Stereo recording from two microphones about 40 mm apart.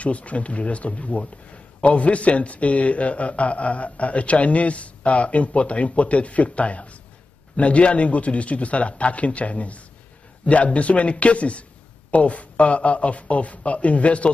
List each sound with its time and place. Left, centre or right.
0.0 s a man's voice: left